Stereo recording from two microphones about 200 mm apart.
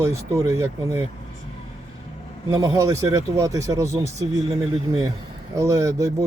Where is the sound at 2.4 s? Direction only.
15° right (ahead or behind).